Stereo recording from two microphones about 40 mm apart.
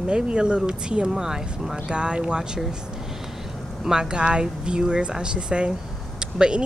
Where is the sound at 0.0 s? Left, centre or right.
Right.